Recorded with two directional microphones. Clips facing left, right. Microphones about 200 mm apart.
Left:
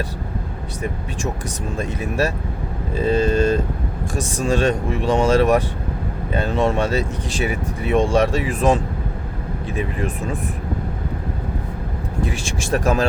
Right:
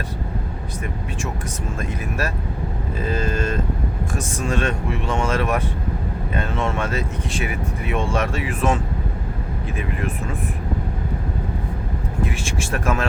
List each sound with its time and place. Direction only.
1.8 s a sound: 30° left (ahead or behind)
4.4 s speech: 35° left (ahead or behind)
12.2 s speech: 35° left (ahead or behind)